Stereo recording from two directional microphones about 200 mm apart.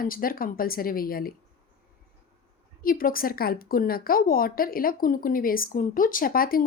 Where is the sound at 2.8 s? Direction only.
45° left (ahead or behind).